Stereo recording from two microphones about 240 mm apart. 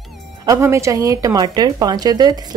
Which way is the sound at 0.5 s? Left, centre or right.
Centre.